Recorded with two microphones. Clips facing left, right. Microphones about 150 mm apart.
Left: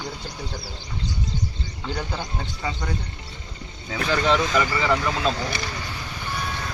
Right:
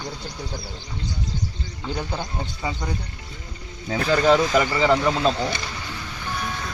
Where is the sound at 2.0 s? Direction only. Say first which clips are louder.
Right 2 dB; 20° right (ahead or behind).